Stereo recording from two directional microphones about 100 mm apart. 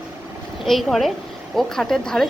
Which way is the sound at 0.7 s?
Centre (ahead or behind).